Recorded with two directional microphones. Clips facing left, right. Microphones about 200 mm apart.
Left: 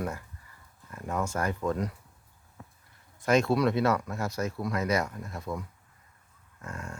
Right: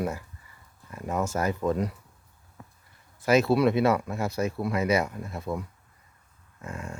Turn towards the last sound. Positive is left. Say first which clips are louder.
# right 3 dB
turn(degrees=-10)  # may be behind; listen again after turning